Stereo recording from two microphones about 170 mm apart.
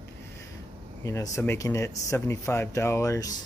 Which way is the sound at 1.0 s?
20° left (ahead or behind).